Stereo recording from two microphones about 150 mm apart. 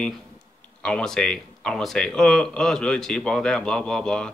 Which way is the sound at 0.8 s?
5° left (ahead or behind).